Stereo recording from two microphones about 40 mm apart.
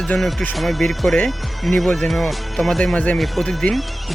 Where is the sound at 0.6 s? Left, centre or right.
Centre.